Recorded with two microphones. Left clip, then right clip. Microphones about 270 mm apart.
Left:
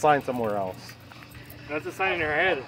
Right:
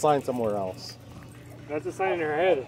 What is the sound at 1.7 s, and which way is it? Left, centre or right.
Speech, left.